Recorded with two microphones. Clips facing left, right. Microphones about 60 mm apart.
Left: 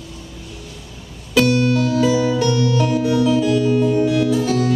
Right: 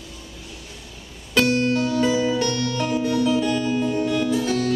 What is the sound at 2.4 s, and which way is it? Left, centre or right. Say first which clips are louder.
Music: left 6 dB; centre.